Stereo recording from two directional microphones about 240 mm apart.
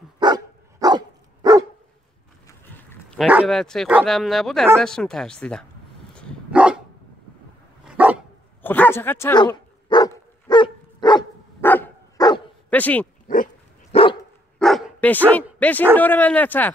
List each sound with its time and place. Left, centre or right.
0.2 s dog: centre
2.4 s speech: centre
6.1 s dog: centre
7.8 s dog: centre
8.6 s dog: centre
12.6 s speech: centre
13.9 s dog: left
14.6 s dog: centre
16.0 s speech: centre